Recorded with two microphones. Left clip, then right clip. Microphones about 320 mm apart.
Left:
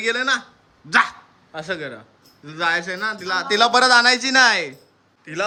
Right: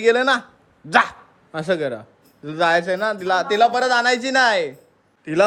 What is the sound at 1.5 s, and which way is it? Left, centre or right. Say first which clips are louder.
Speech: right 6 dB; centre.